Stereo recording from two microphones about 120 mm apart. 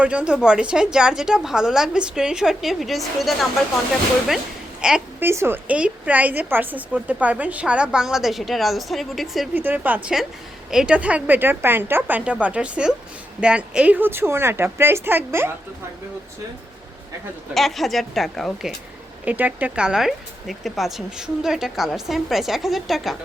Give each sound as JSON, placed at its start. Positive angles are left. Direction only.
{"t": 0.0, "sound": "a woman's voice", "side_deg": -10}
{"t": 4.8, "sound": "a sound", "side_deg": -5}
{"t": 5.2, "sound": "a woman's voice", "side_deg": -20}
{"t": 9.6, "sound": "a woman's voice", "side_deg": -15}
{"t": 17.5, "sound": "a woman's voice", "side_deg": 0}
{"t": 19.2, "sound": "a woman's voice", "side_deg": -15}